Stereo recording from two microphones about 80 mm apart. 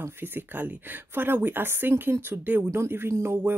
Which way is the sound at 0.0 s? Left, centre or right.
Right.